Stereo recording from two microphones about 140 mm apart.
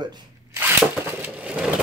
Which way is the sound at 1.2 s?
10° right (ahead or behind).